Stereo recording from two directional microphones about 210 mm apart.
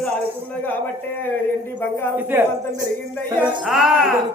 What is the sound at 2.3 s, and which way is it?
Speech, 10° right (ahead or behind).